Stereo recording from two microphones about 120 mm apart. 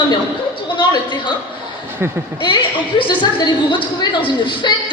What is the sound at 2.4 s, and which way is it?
A woman's voice, 40° left (ahead or behind).